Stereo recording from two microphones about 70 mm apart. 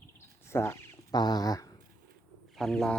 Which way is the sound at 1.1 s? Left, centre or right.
Left.